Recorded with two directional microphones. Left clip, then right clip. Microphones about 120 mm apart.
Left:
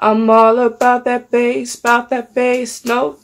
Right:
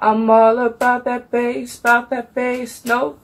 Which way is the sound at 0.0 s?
40° left (ahead or behind).